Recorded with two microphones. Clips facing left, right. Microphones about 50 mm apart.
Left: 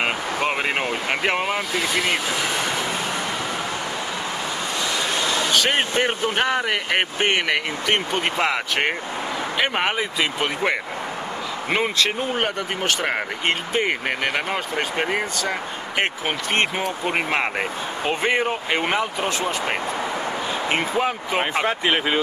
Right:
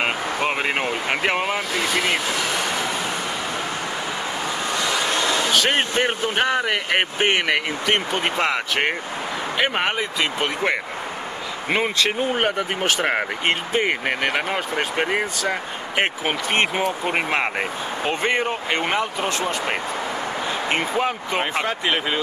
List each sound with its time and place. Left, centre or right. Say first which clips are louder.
0.0 s speech: even; centre
5.0 s speech: right 1 dB; centre
20.7 s speech: even; centre